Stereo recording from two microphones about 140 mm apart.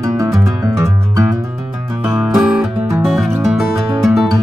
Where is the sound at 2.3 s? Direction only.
Centre (ahead or behind).